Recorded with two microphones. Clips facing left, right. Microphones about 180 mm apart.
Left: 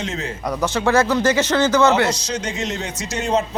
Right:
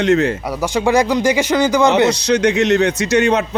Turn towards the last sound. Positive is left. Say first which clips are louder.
# right 7 dB
turn(degrees=-70)  # may be behind; listen again after turning